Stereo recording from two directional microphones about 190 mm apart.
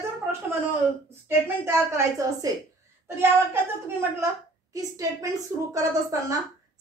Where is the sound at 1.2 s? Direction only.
10° right (ahead or behind).